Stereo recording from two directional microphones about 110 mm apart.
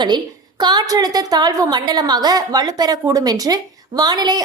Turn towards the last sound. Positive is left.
turn(degrees=-40)  # may be behind; listen again after turning